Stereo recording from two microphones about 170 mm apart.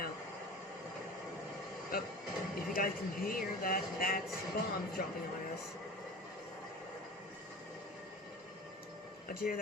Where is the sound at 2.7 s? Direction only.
55° left (ahead or behind).